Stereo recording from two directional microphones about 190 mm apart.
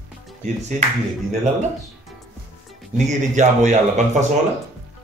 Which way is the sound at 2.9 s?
40° right (ahead or behind).